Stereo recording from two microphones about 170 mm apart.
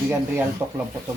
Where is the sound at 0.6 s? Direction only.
20° right (ahead or behind).